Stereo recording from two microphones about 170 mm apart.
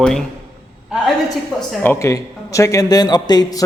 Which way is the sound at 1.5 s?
Centre (ahead or behind).